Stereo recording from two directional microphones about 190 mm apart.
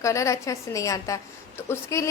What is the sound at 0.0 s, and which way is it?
A woman's voice, 15° left (ahead or behind).